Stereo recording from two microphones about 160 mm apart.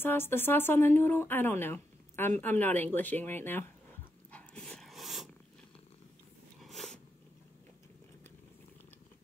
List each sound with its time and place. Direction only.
0.0 s speech: 15° left (ahead or behind)
4.3 s dog: 5° left (ahead or behind)
6.6 s a sound: centre (ahead or behind)